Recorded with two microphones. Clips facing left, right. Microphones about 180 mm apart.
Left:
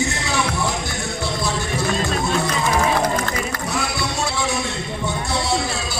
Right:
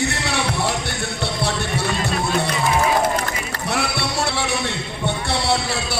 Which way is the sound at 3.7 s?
65° right (ahead or behind).